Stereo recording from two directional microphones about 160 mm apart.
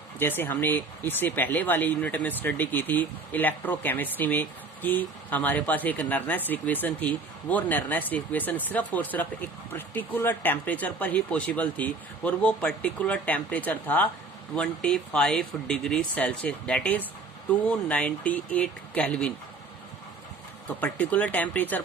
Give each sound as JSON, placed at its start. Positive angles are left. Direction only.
{"t": 0.2, "sound": "speech", "side_deg": 15}
{"t": 20.8, "sound": "speech", "side_deg": 10}